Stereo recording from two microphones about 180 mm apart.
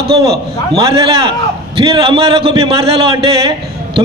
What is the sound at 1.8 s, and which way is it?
A man's voice, 30° right (ahead or behind).